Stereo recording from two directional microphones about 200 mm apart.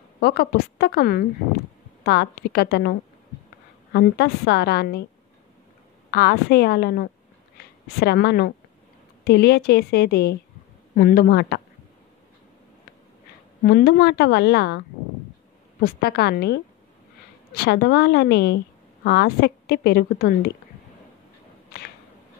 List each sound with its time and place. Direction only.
0.2 s a woman's voice: 50° left (ahead or behind)
6.0 s a woman's voice: 50° left (ahead or behind)
13.7 s a woman's voice: 50° left (ahead or behind)
15.8 s a woman's voice: 50° left (ahead or behind)
21.7 s a sound: 50° left (ahead or behind)